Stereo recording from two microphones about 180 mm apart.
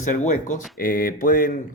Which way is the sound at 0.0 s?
45° left (ahead or behind).